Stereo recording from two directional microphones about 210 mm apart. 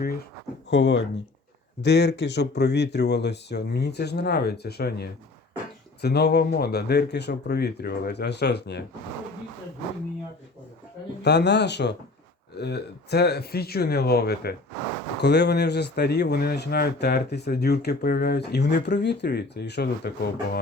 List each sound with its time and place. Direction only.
0.7 s speech: 60° left (ahead or behind)
11.2 s speech: 55° left (ahead or behind)